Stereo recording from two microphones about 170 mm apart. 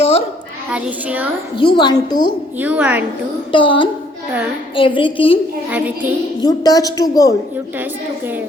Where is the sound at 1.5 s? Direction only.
25° left (ahead or behind).